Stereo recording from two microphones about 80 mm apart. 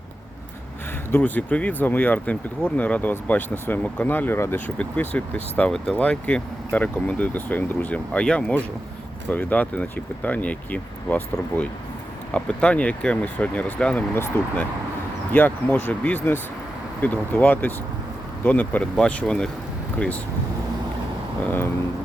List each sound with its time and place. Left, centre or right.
1.1 s speech: left